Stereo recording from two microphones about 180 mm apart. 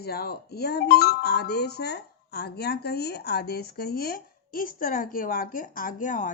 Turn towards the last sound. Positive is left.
turn(degrees=45)  # may be behind; listen again after turning